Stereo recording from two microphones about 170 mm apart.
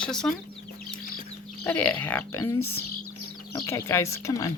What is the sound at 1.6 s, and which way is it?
Speech, 10° left (ahead or behind).